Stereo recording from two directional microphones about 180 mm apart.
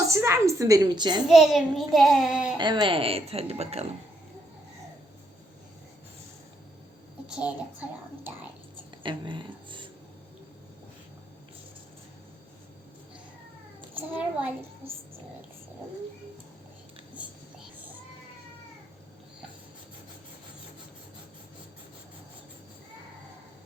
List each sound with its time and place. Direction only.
0.1 s a woman's voice: 15° right (ahead or behind)
1.3 s child singing: centre (ahead or behind)
2.6 s speech: 25° right (ahead or behind)
7.3 s a child's voice: 5° right (ahead or behind)
9.0 s a sound: 25° right (ahead or behind)
13.9 s a child's voice: 10° right (ahead or behind)